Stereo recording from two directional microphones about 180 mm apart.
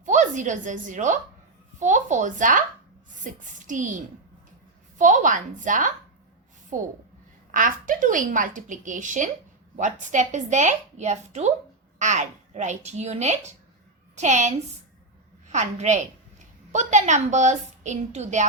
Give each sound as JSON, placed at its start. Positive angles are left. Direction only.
{"t": 0.0, "sound": "a woman's voice", "side_deg": -45}